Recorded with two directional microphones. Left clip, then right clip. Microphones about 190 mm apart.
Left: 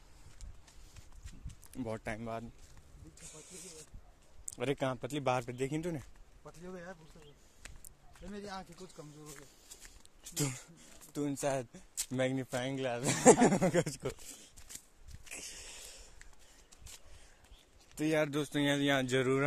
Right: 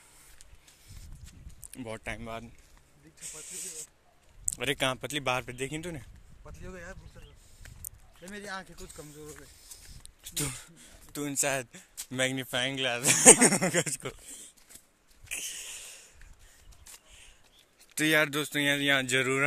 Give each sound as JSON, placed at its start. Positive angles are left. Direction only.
{"t": 1.7, "sound": "speech", "side_deg": 15}
{"t": 4.5, "sound": "a sound", "side_deg": 10}
{"t": 4.7, "sound": "speech", "side_deg": 0}
{"t": 6.4, "sound": "speech", "side_deg": -10}
{"t": 8.3, "sound": "speech", "side_deg": -35}
{"t": 10.0, "sound": "speech", "side_deg": 20}
{"t": 11.1, "sound": "speech", "side_deg": 5}
{"t": 15.2, "sound": "sniff", "side_deg": 10}
{"t": 17.9, "sound": "speech", "side_deg": -5}